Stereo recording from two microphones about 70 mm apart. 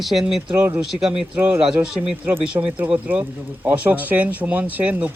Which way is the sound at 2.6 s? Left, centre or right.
Right.